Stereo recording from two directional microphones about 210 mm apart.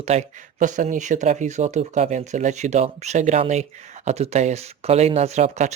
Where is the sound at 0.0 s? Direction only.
30° right (ahead or behind).